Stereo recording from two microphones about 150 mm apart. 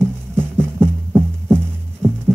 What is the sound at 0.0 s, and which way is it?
Music, 15° right (ahead or behind).